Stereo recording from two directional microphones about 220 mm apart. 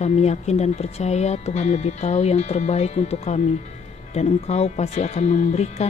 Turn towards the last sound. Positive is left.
turn(degrees=30)  # may be behind; listen again after turning